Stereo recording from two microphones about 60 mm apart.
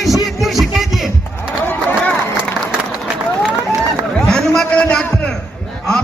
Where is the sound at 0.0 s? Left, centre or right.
Centre.